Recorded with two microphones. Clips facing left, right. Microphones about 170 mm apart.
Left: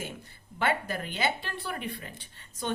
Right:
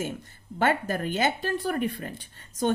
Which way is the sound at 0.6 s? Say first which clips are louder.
Right 5 dB; 45° right (ahead or behind).